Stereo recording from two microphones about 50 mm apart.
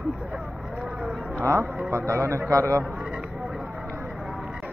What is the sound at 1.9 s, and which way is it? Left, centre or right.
Speech, right.